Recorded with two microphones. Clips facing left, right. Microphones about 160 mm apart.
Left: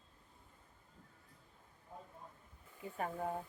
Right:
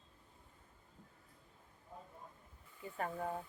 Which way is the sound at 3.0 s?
5° left (ahead or behind).